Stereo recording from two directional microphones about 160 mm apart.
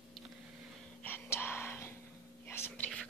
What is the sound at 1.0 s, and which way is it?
Whispering, 15° left (ahead or behind).